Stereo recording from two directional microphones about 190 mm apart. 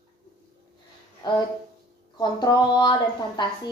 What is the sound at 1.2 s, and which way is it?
A woman's voice, 20° left (ahead or behind).